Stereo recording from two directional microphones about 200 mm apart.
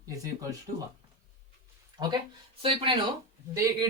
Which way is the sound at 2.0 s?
20° right (ahead or behind).